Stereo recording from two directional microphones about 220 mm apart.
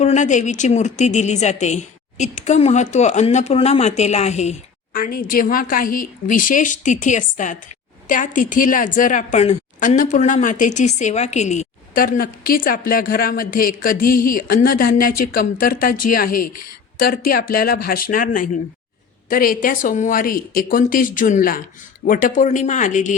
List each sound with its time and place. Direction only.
0.0 s a woman's voice: 30° left (ahead or behind)